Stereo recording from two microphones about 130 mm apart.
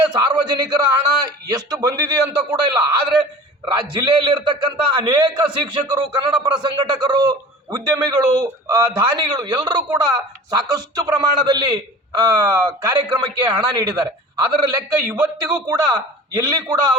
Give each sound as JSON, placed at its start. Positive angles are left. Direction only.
{"t": 0.0, "sound": "a man's voice", "side_deg": -35}